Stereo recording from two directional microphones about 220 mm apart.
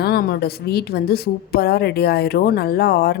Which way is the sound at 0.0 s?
45° left (ahead or behind).